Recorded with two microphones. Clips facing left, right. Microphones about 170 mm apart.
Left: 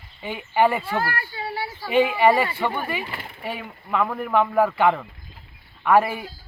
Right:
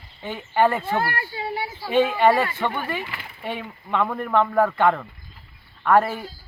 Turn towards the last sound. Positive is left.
turn(degrees=10)  # may be behind; listen again after turning